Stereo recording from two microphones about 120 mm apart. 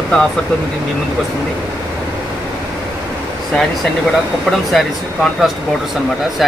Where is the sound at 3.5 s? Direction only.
Centre (ahead or behind).